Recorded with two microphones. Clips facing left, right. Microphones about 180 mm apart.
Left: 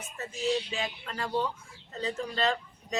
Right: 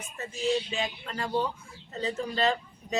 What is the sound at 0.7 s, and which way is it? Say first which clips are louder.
Speech: right 2 dB; centre (ahead or behind).